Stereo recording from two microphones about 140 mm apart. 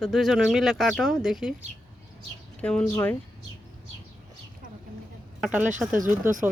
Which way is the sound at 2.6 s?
5° left (ahead or behind).